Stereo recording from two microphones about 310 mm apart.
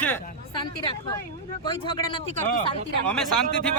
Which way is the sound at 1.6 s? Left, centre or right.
Centre.